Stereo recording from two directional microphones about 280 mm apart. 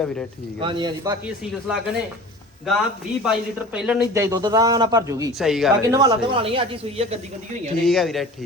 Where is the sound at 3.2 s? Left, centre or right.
Centre.